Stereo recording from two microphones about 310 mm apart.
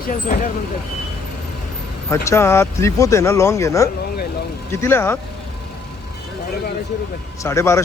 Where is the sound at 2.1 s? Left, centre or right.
Centre.